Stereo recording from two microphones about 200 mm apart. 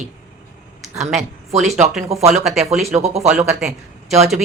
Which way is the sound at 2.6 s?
35° right (ahead or behind).